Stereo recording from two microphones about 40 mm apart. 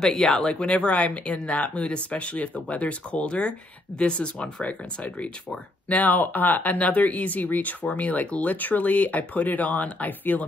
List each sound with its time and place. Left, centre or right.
0.0 s speech: centre
0.5 s speech: left
4.6 s speech: left
7.8 s speech: left